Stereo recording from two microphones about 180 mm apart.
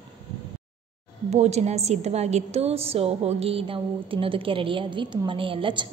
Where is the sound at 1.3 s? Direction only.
35° right (ahead or behind).